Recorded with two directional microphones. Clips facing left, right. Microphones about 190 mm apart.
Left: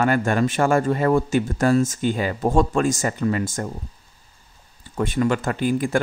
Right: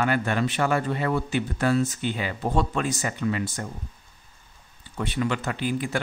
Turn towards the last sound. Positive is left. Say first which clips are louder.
# left 6 dB
turn(degrees=45)  # may be behind; listen again after turning